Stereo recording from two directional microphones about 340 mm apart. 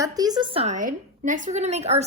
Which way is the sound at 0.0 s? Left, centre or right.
Centre.